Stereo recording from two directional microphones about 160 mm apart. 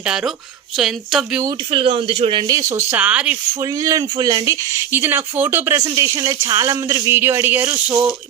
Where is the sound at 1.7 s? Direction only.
35° right (ahead or behind).